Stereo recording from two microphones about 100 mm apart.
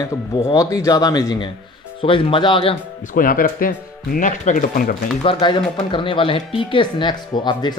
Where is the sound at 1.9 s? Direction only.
60° left (ahead or behind).